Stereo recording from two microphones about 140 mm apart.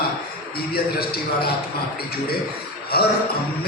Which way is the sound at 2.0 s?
90° left.